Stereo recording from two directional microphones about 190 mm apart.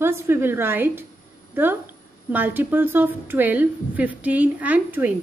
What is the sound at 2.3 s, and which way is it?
A woman's voice, 10° right (ahead or behind).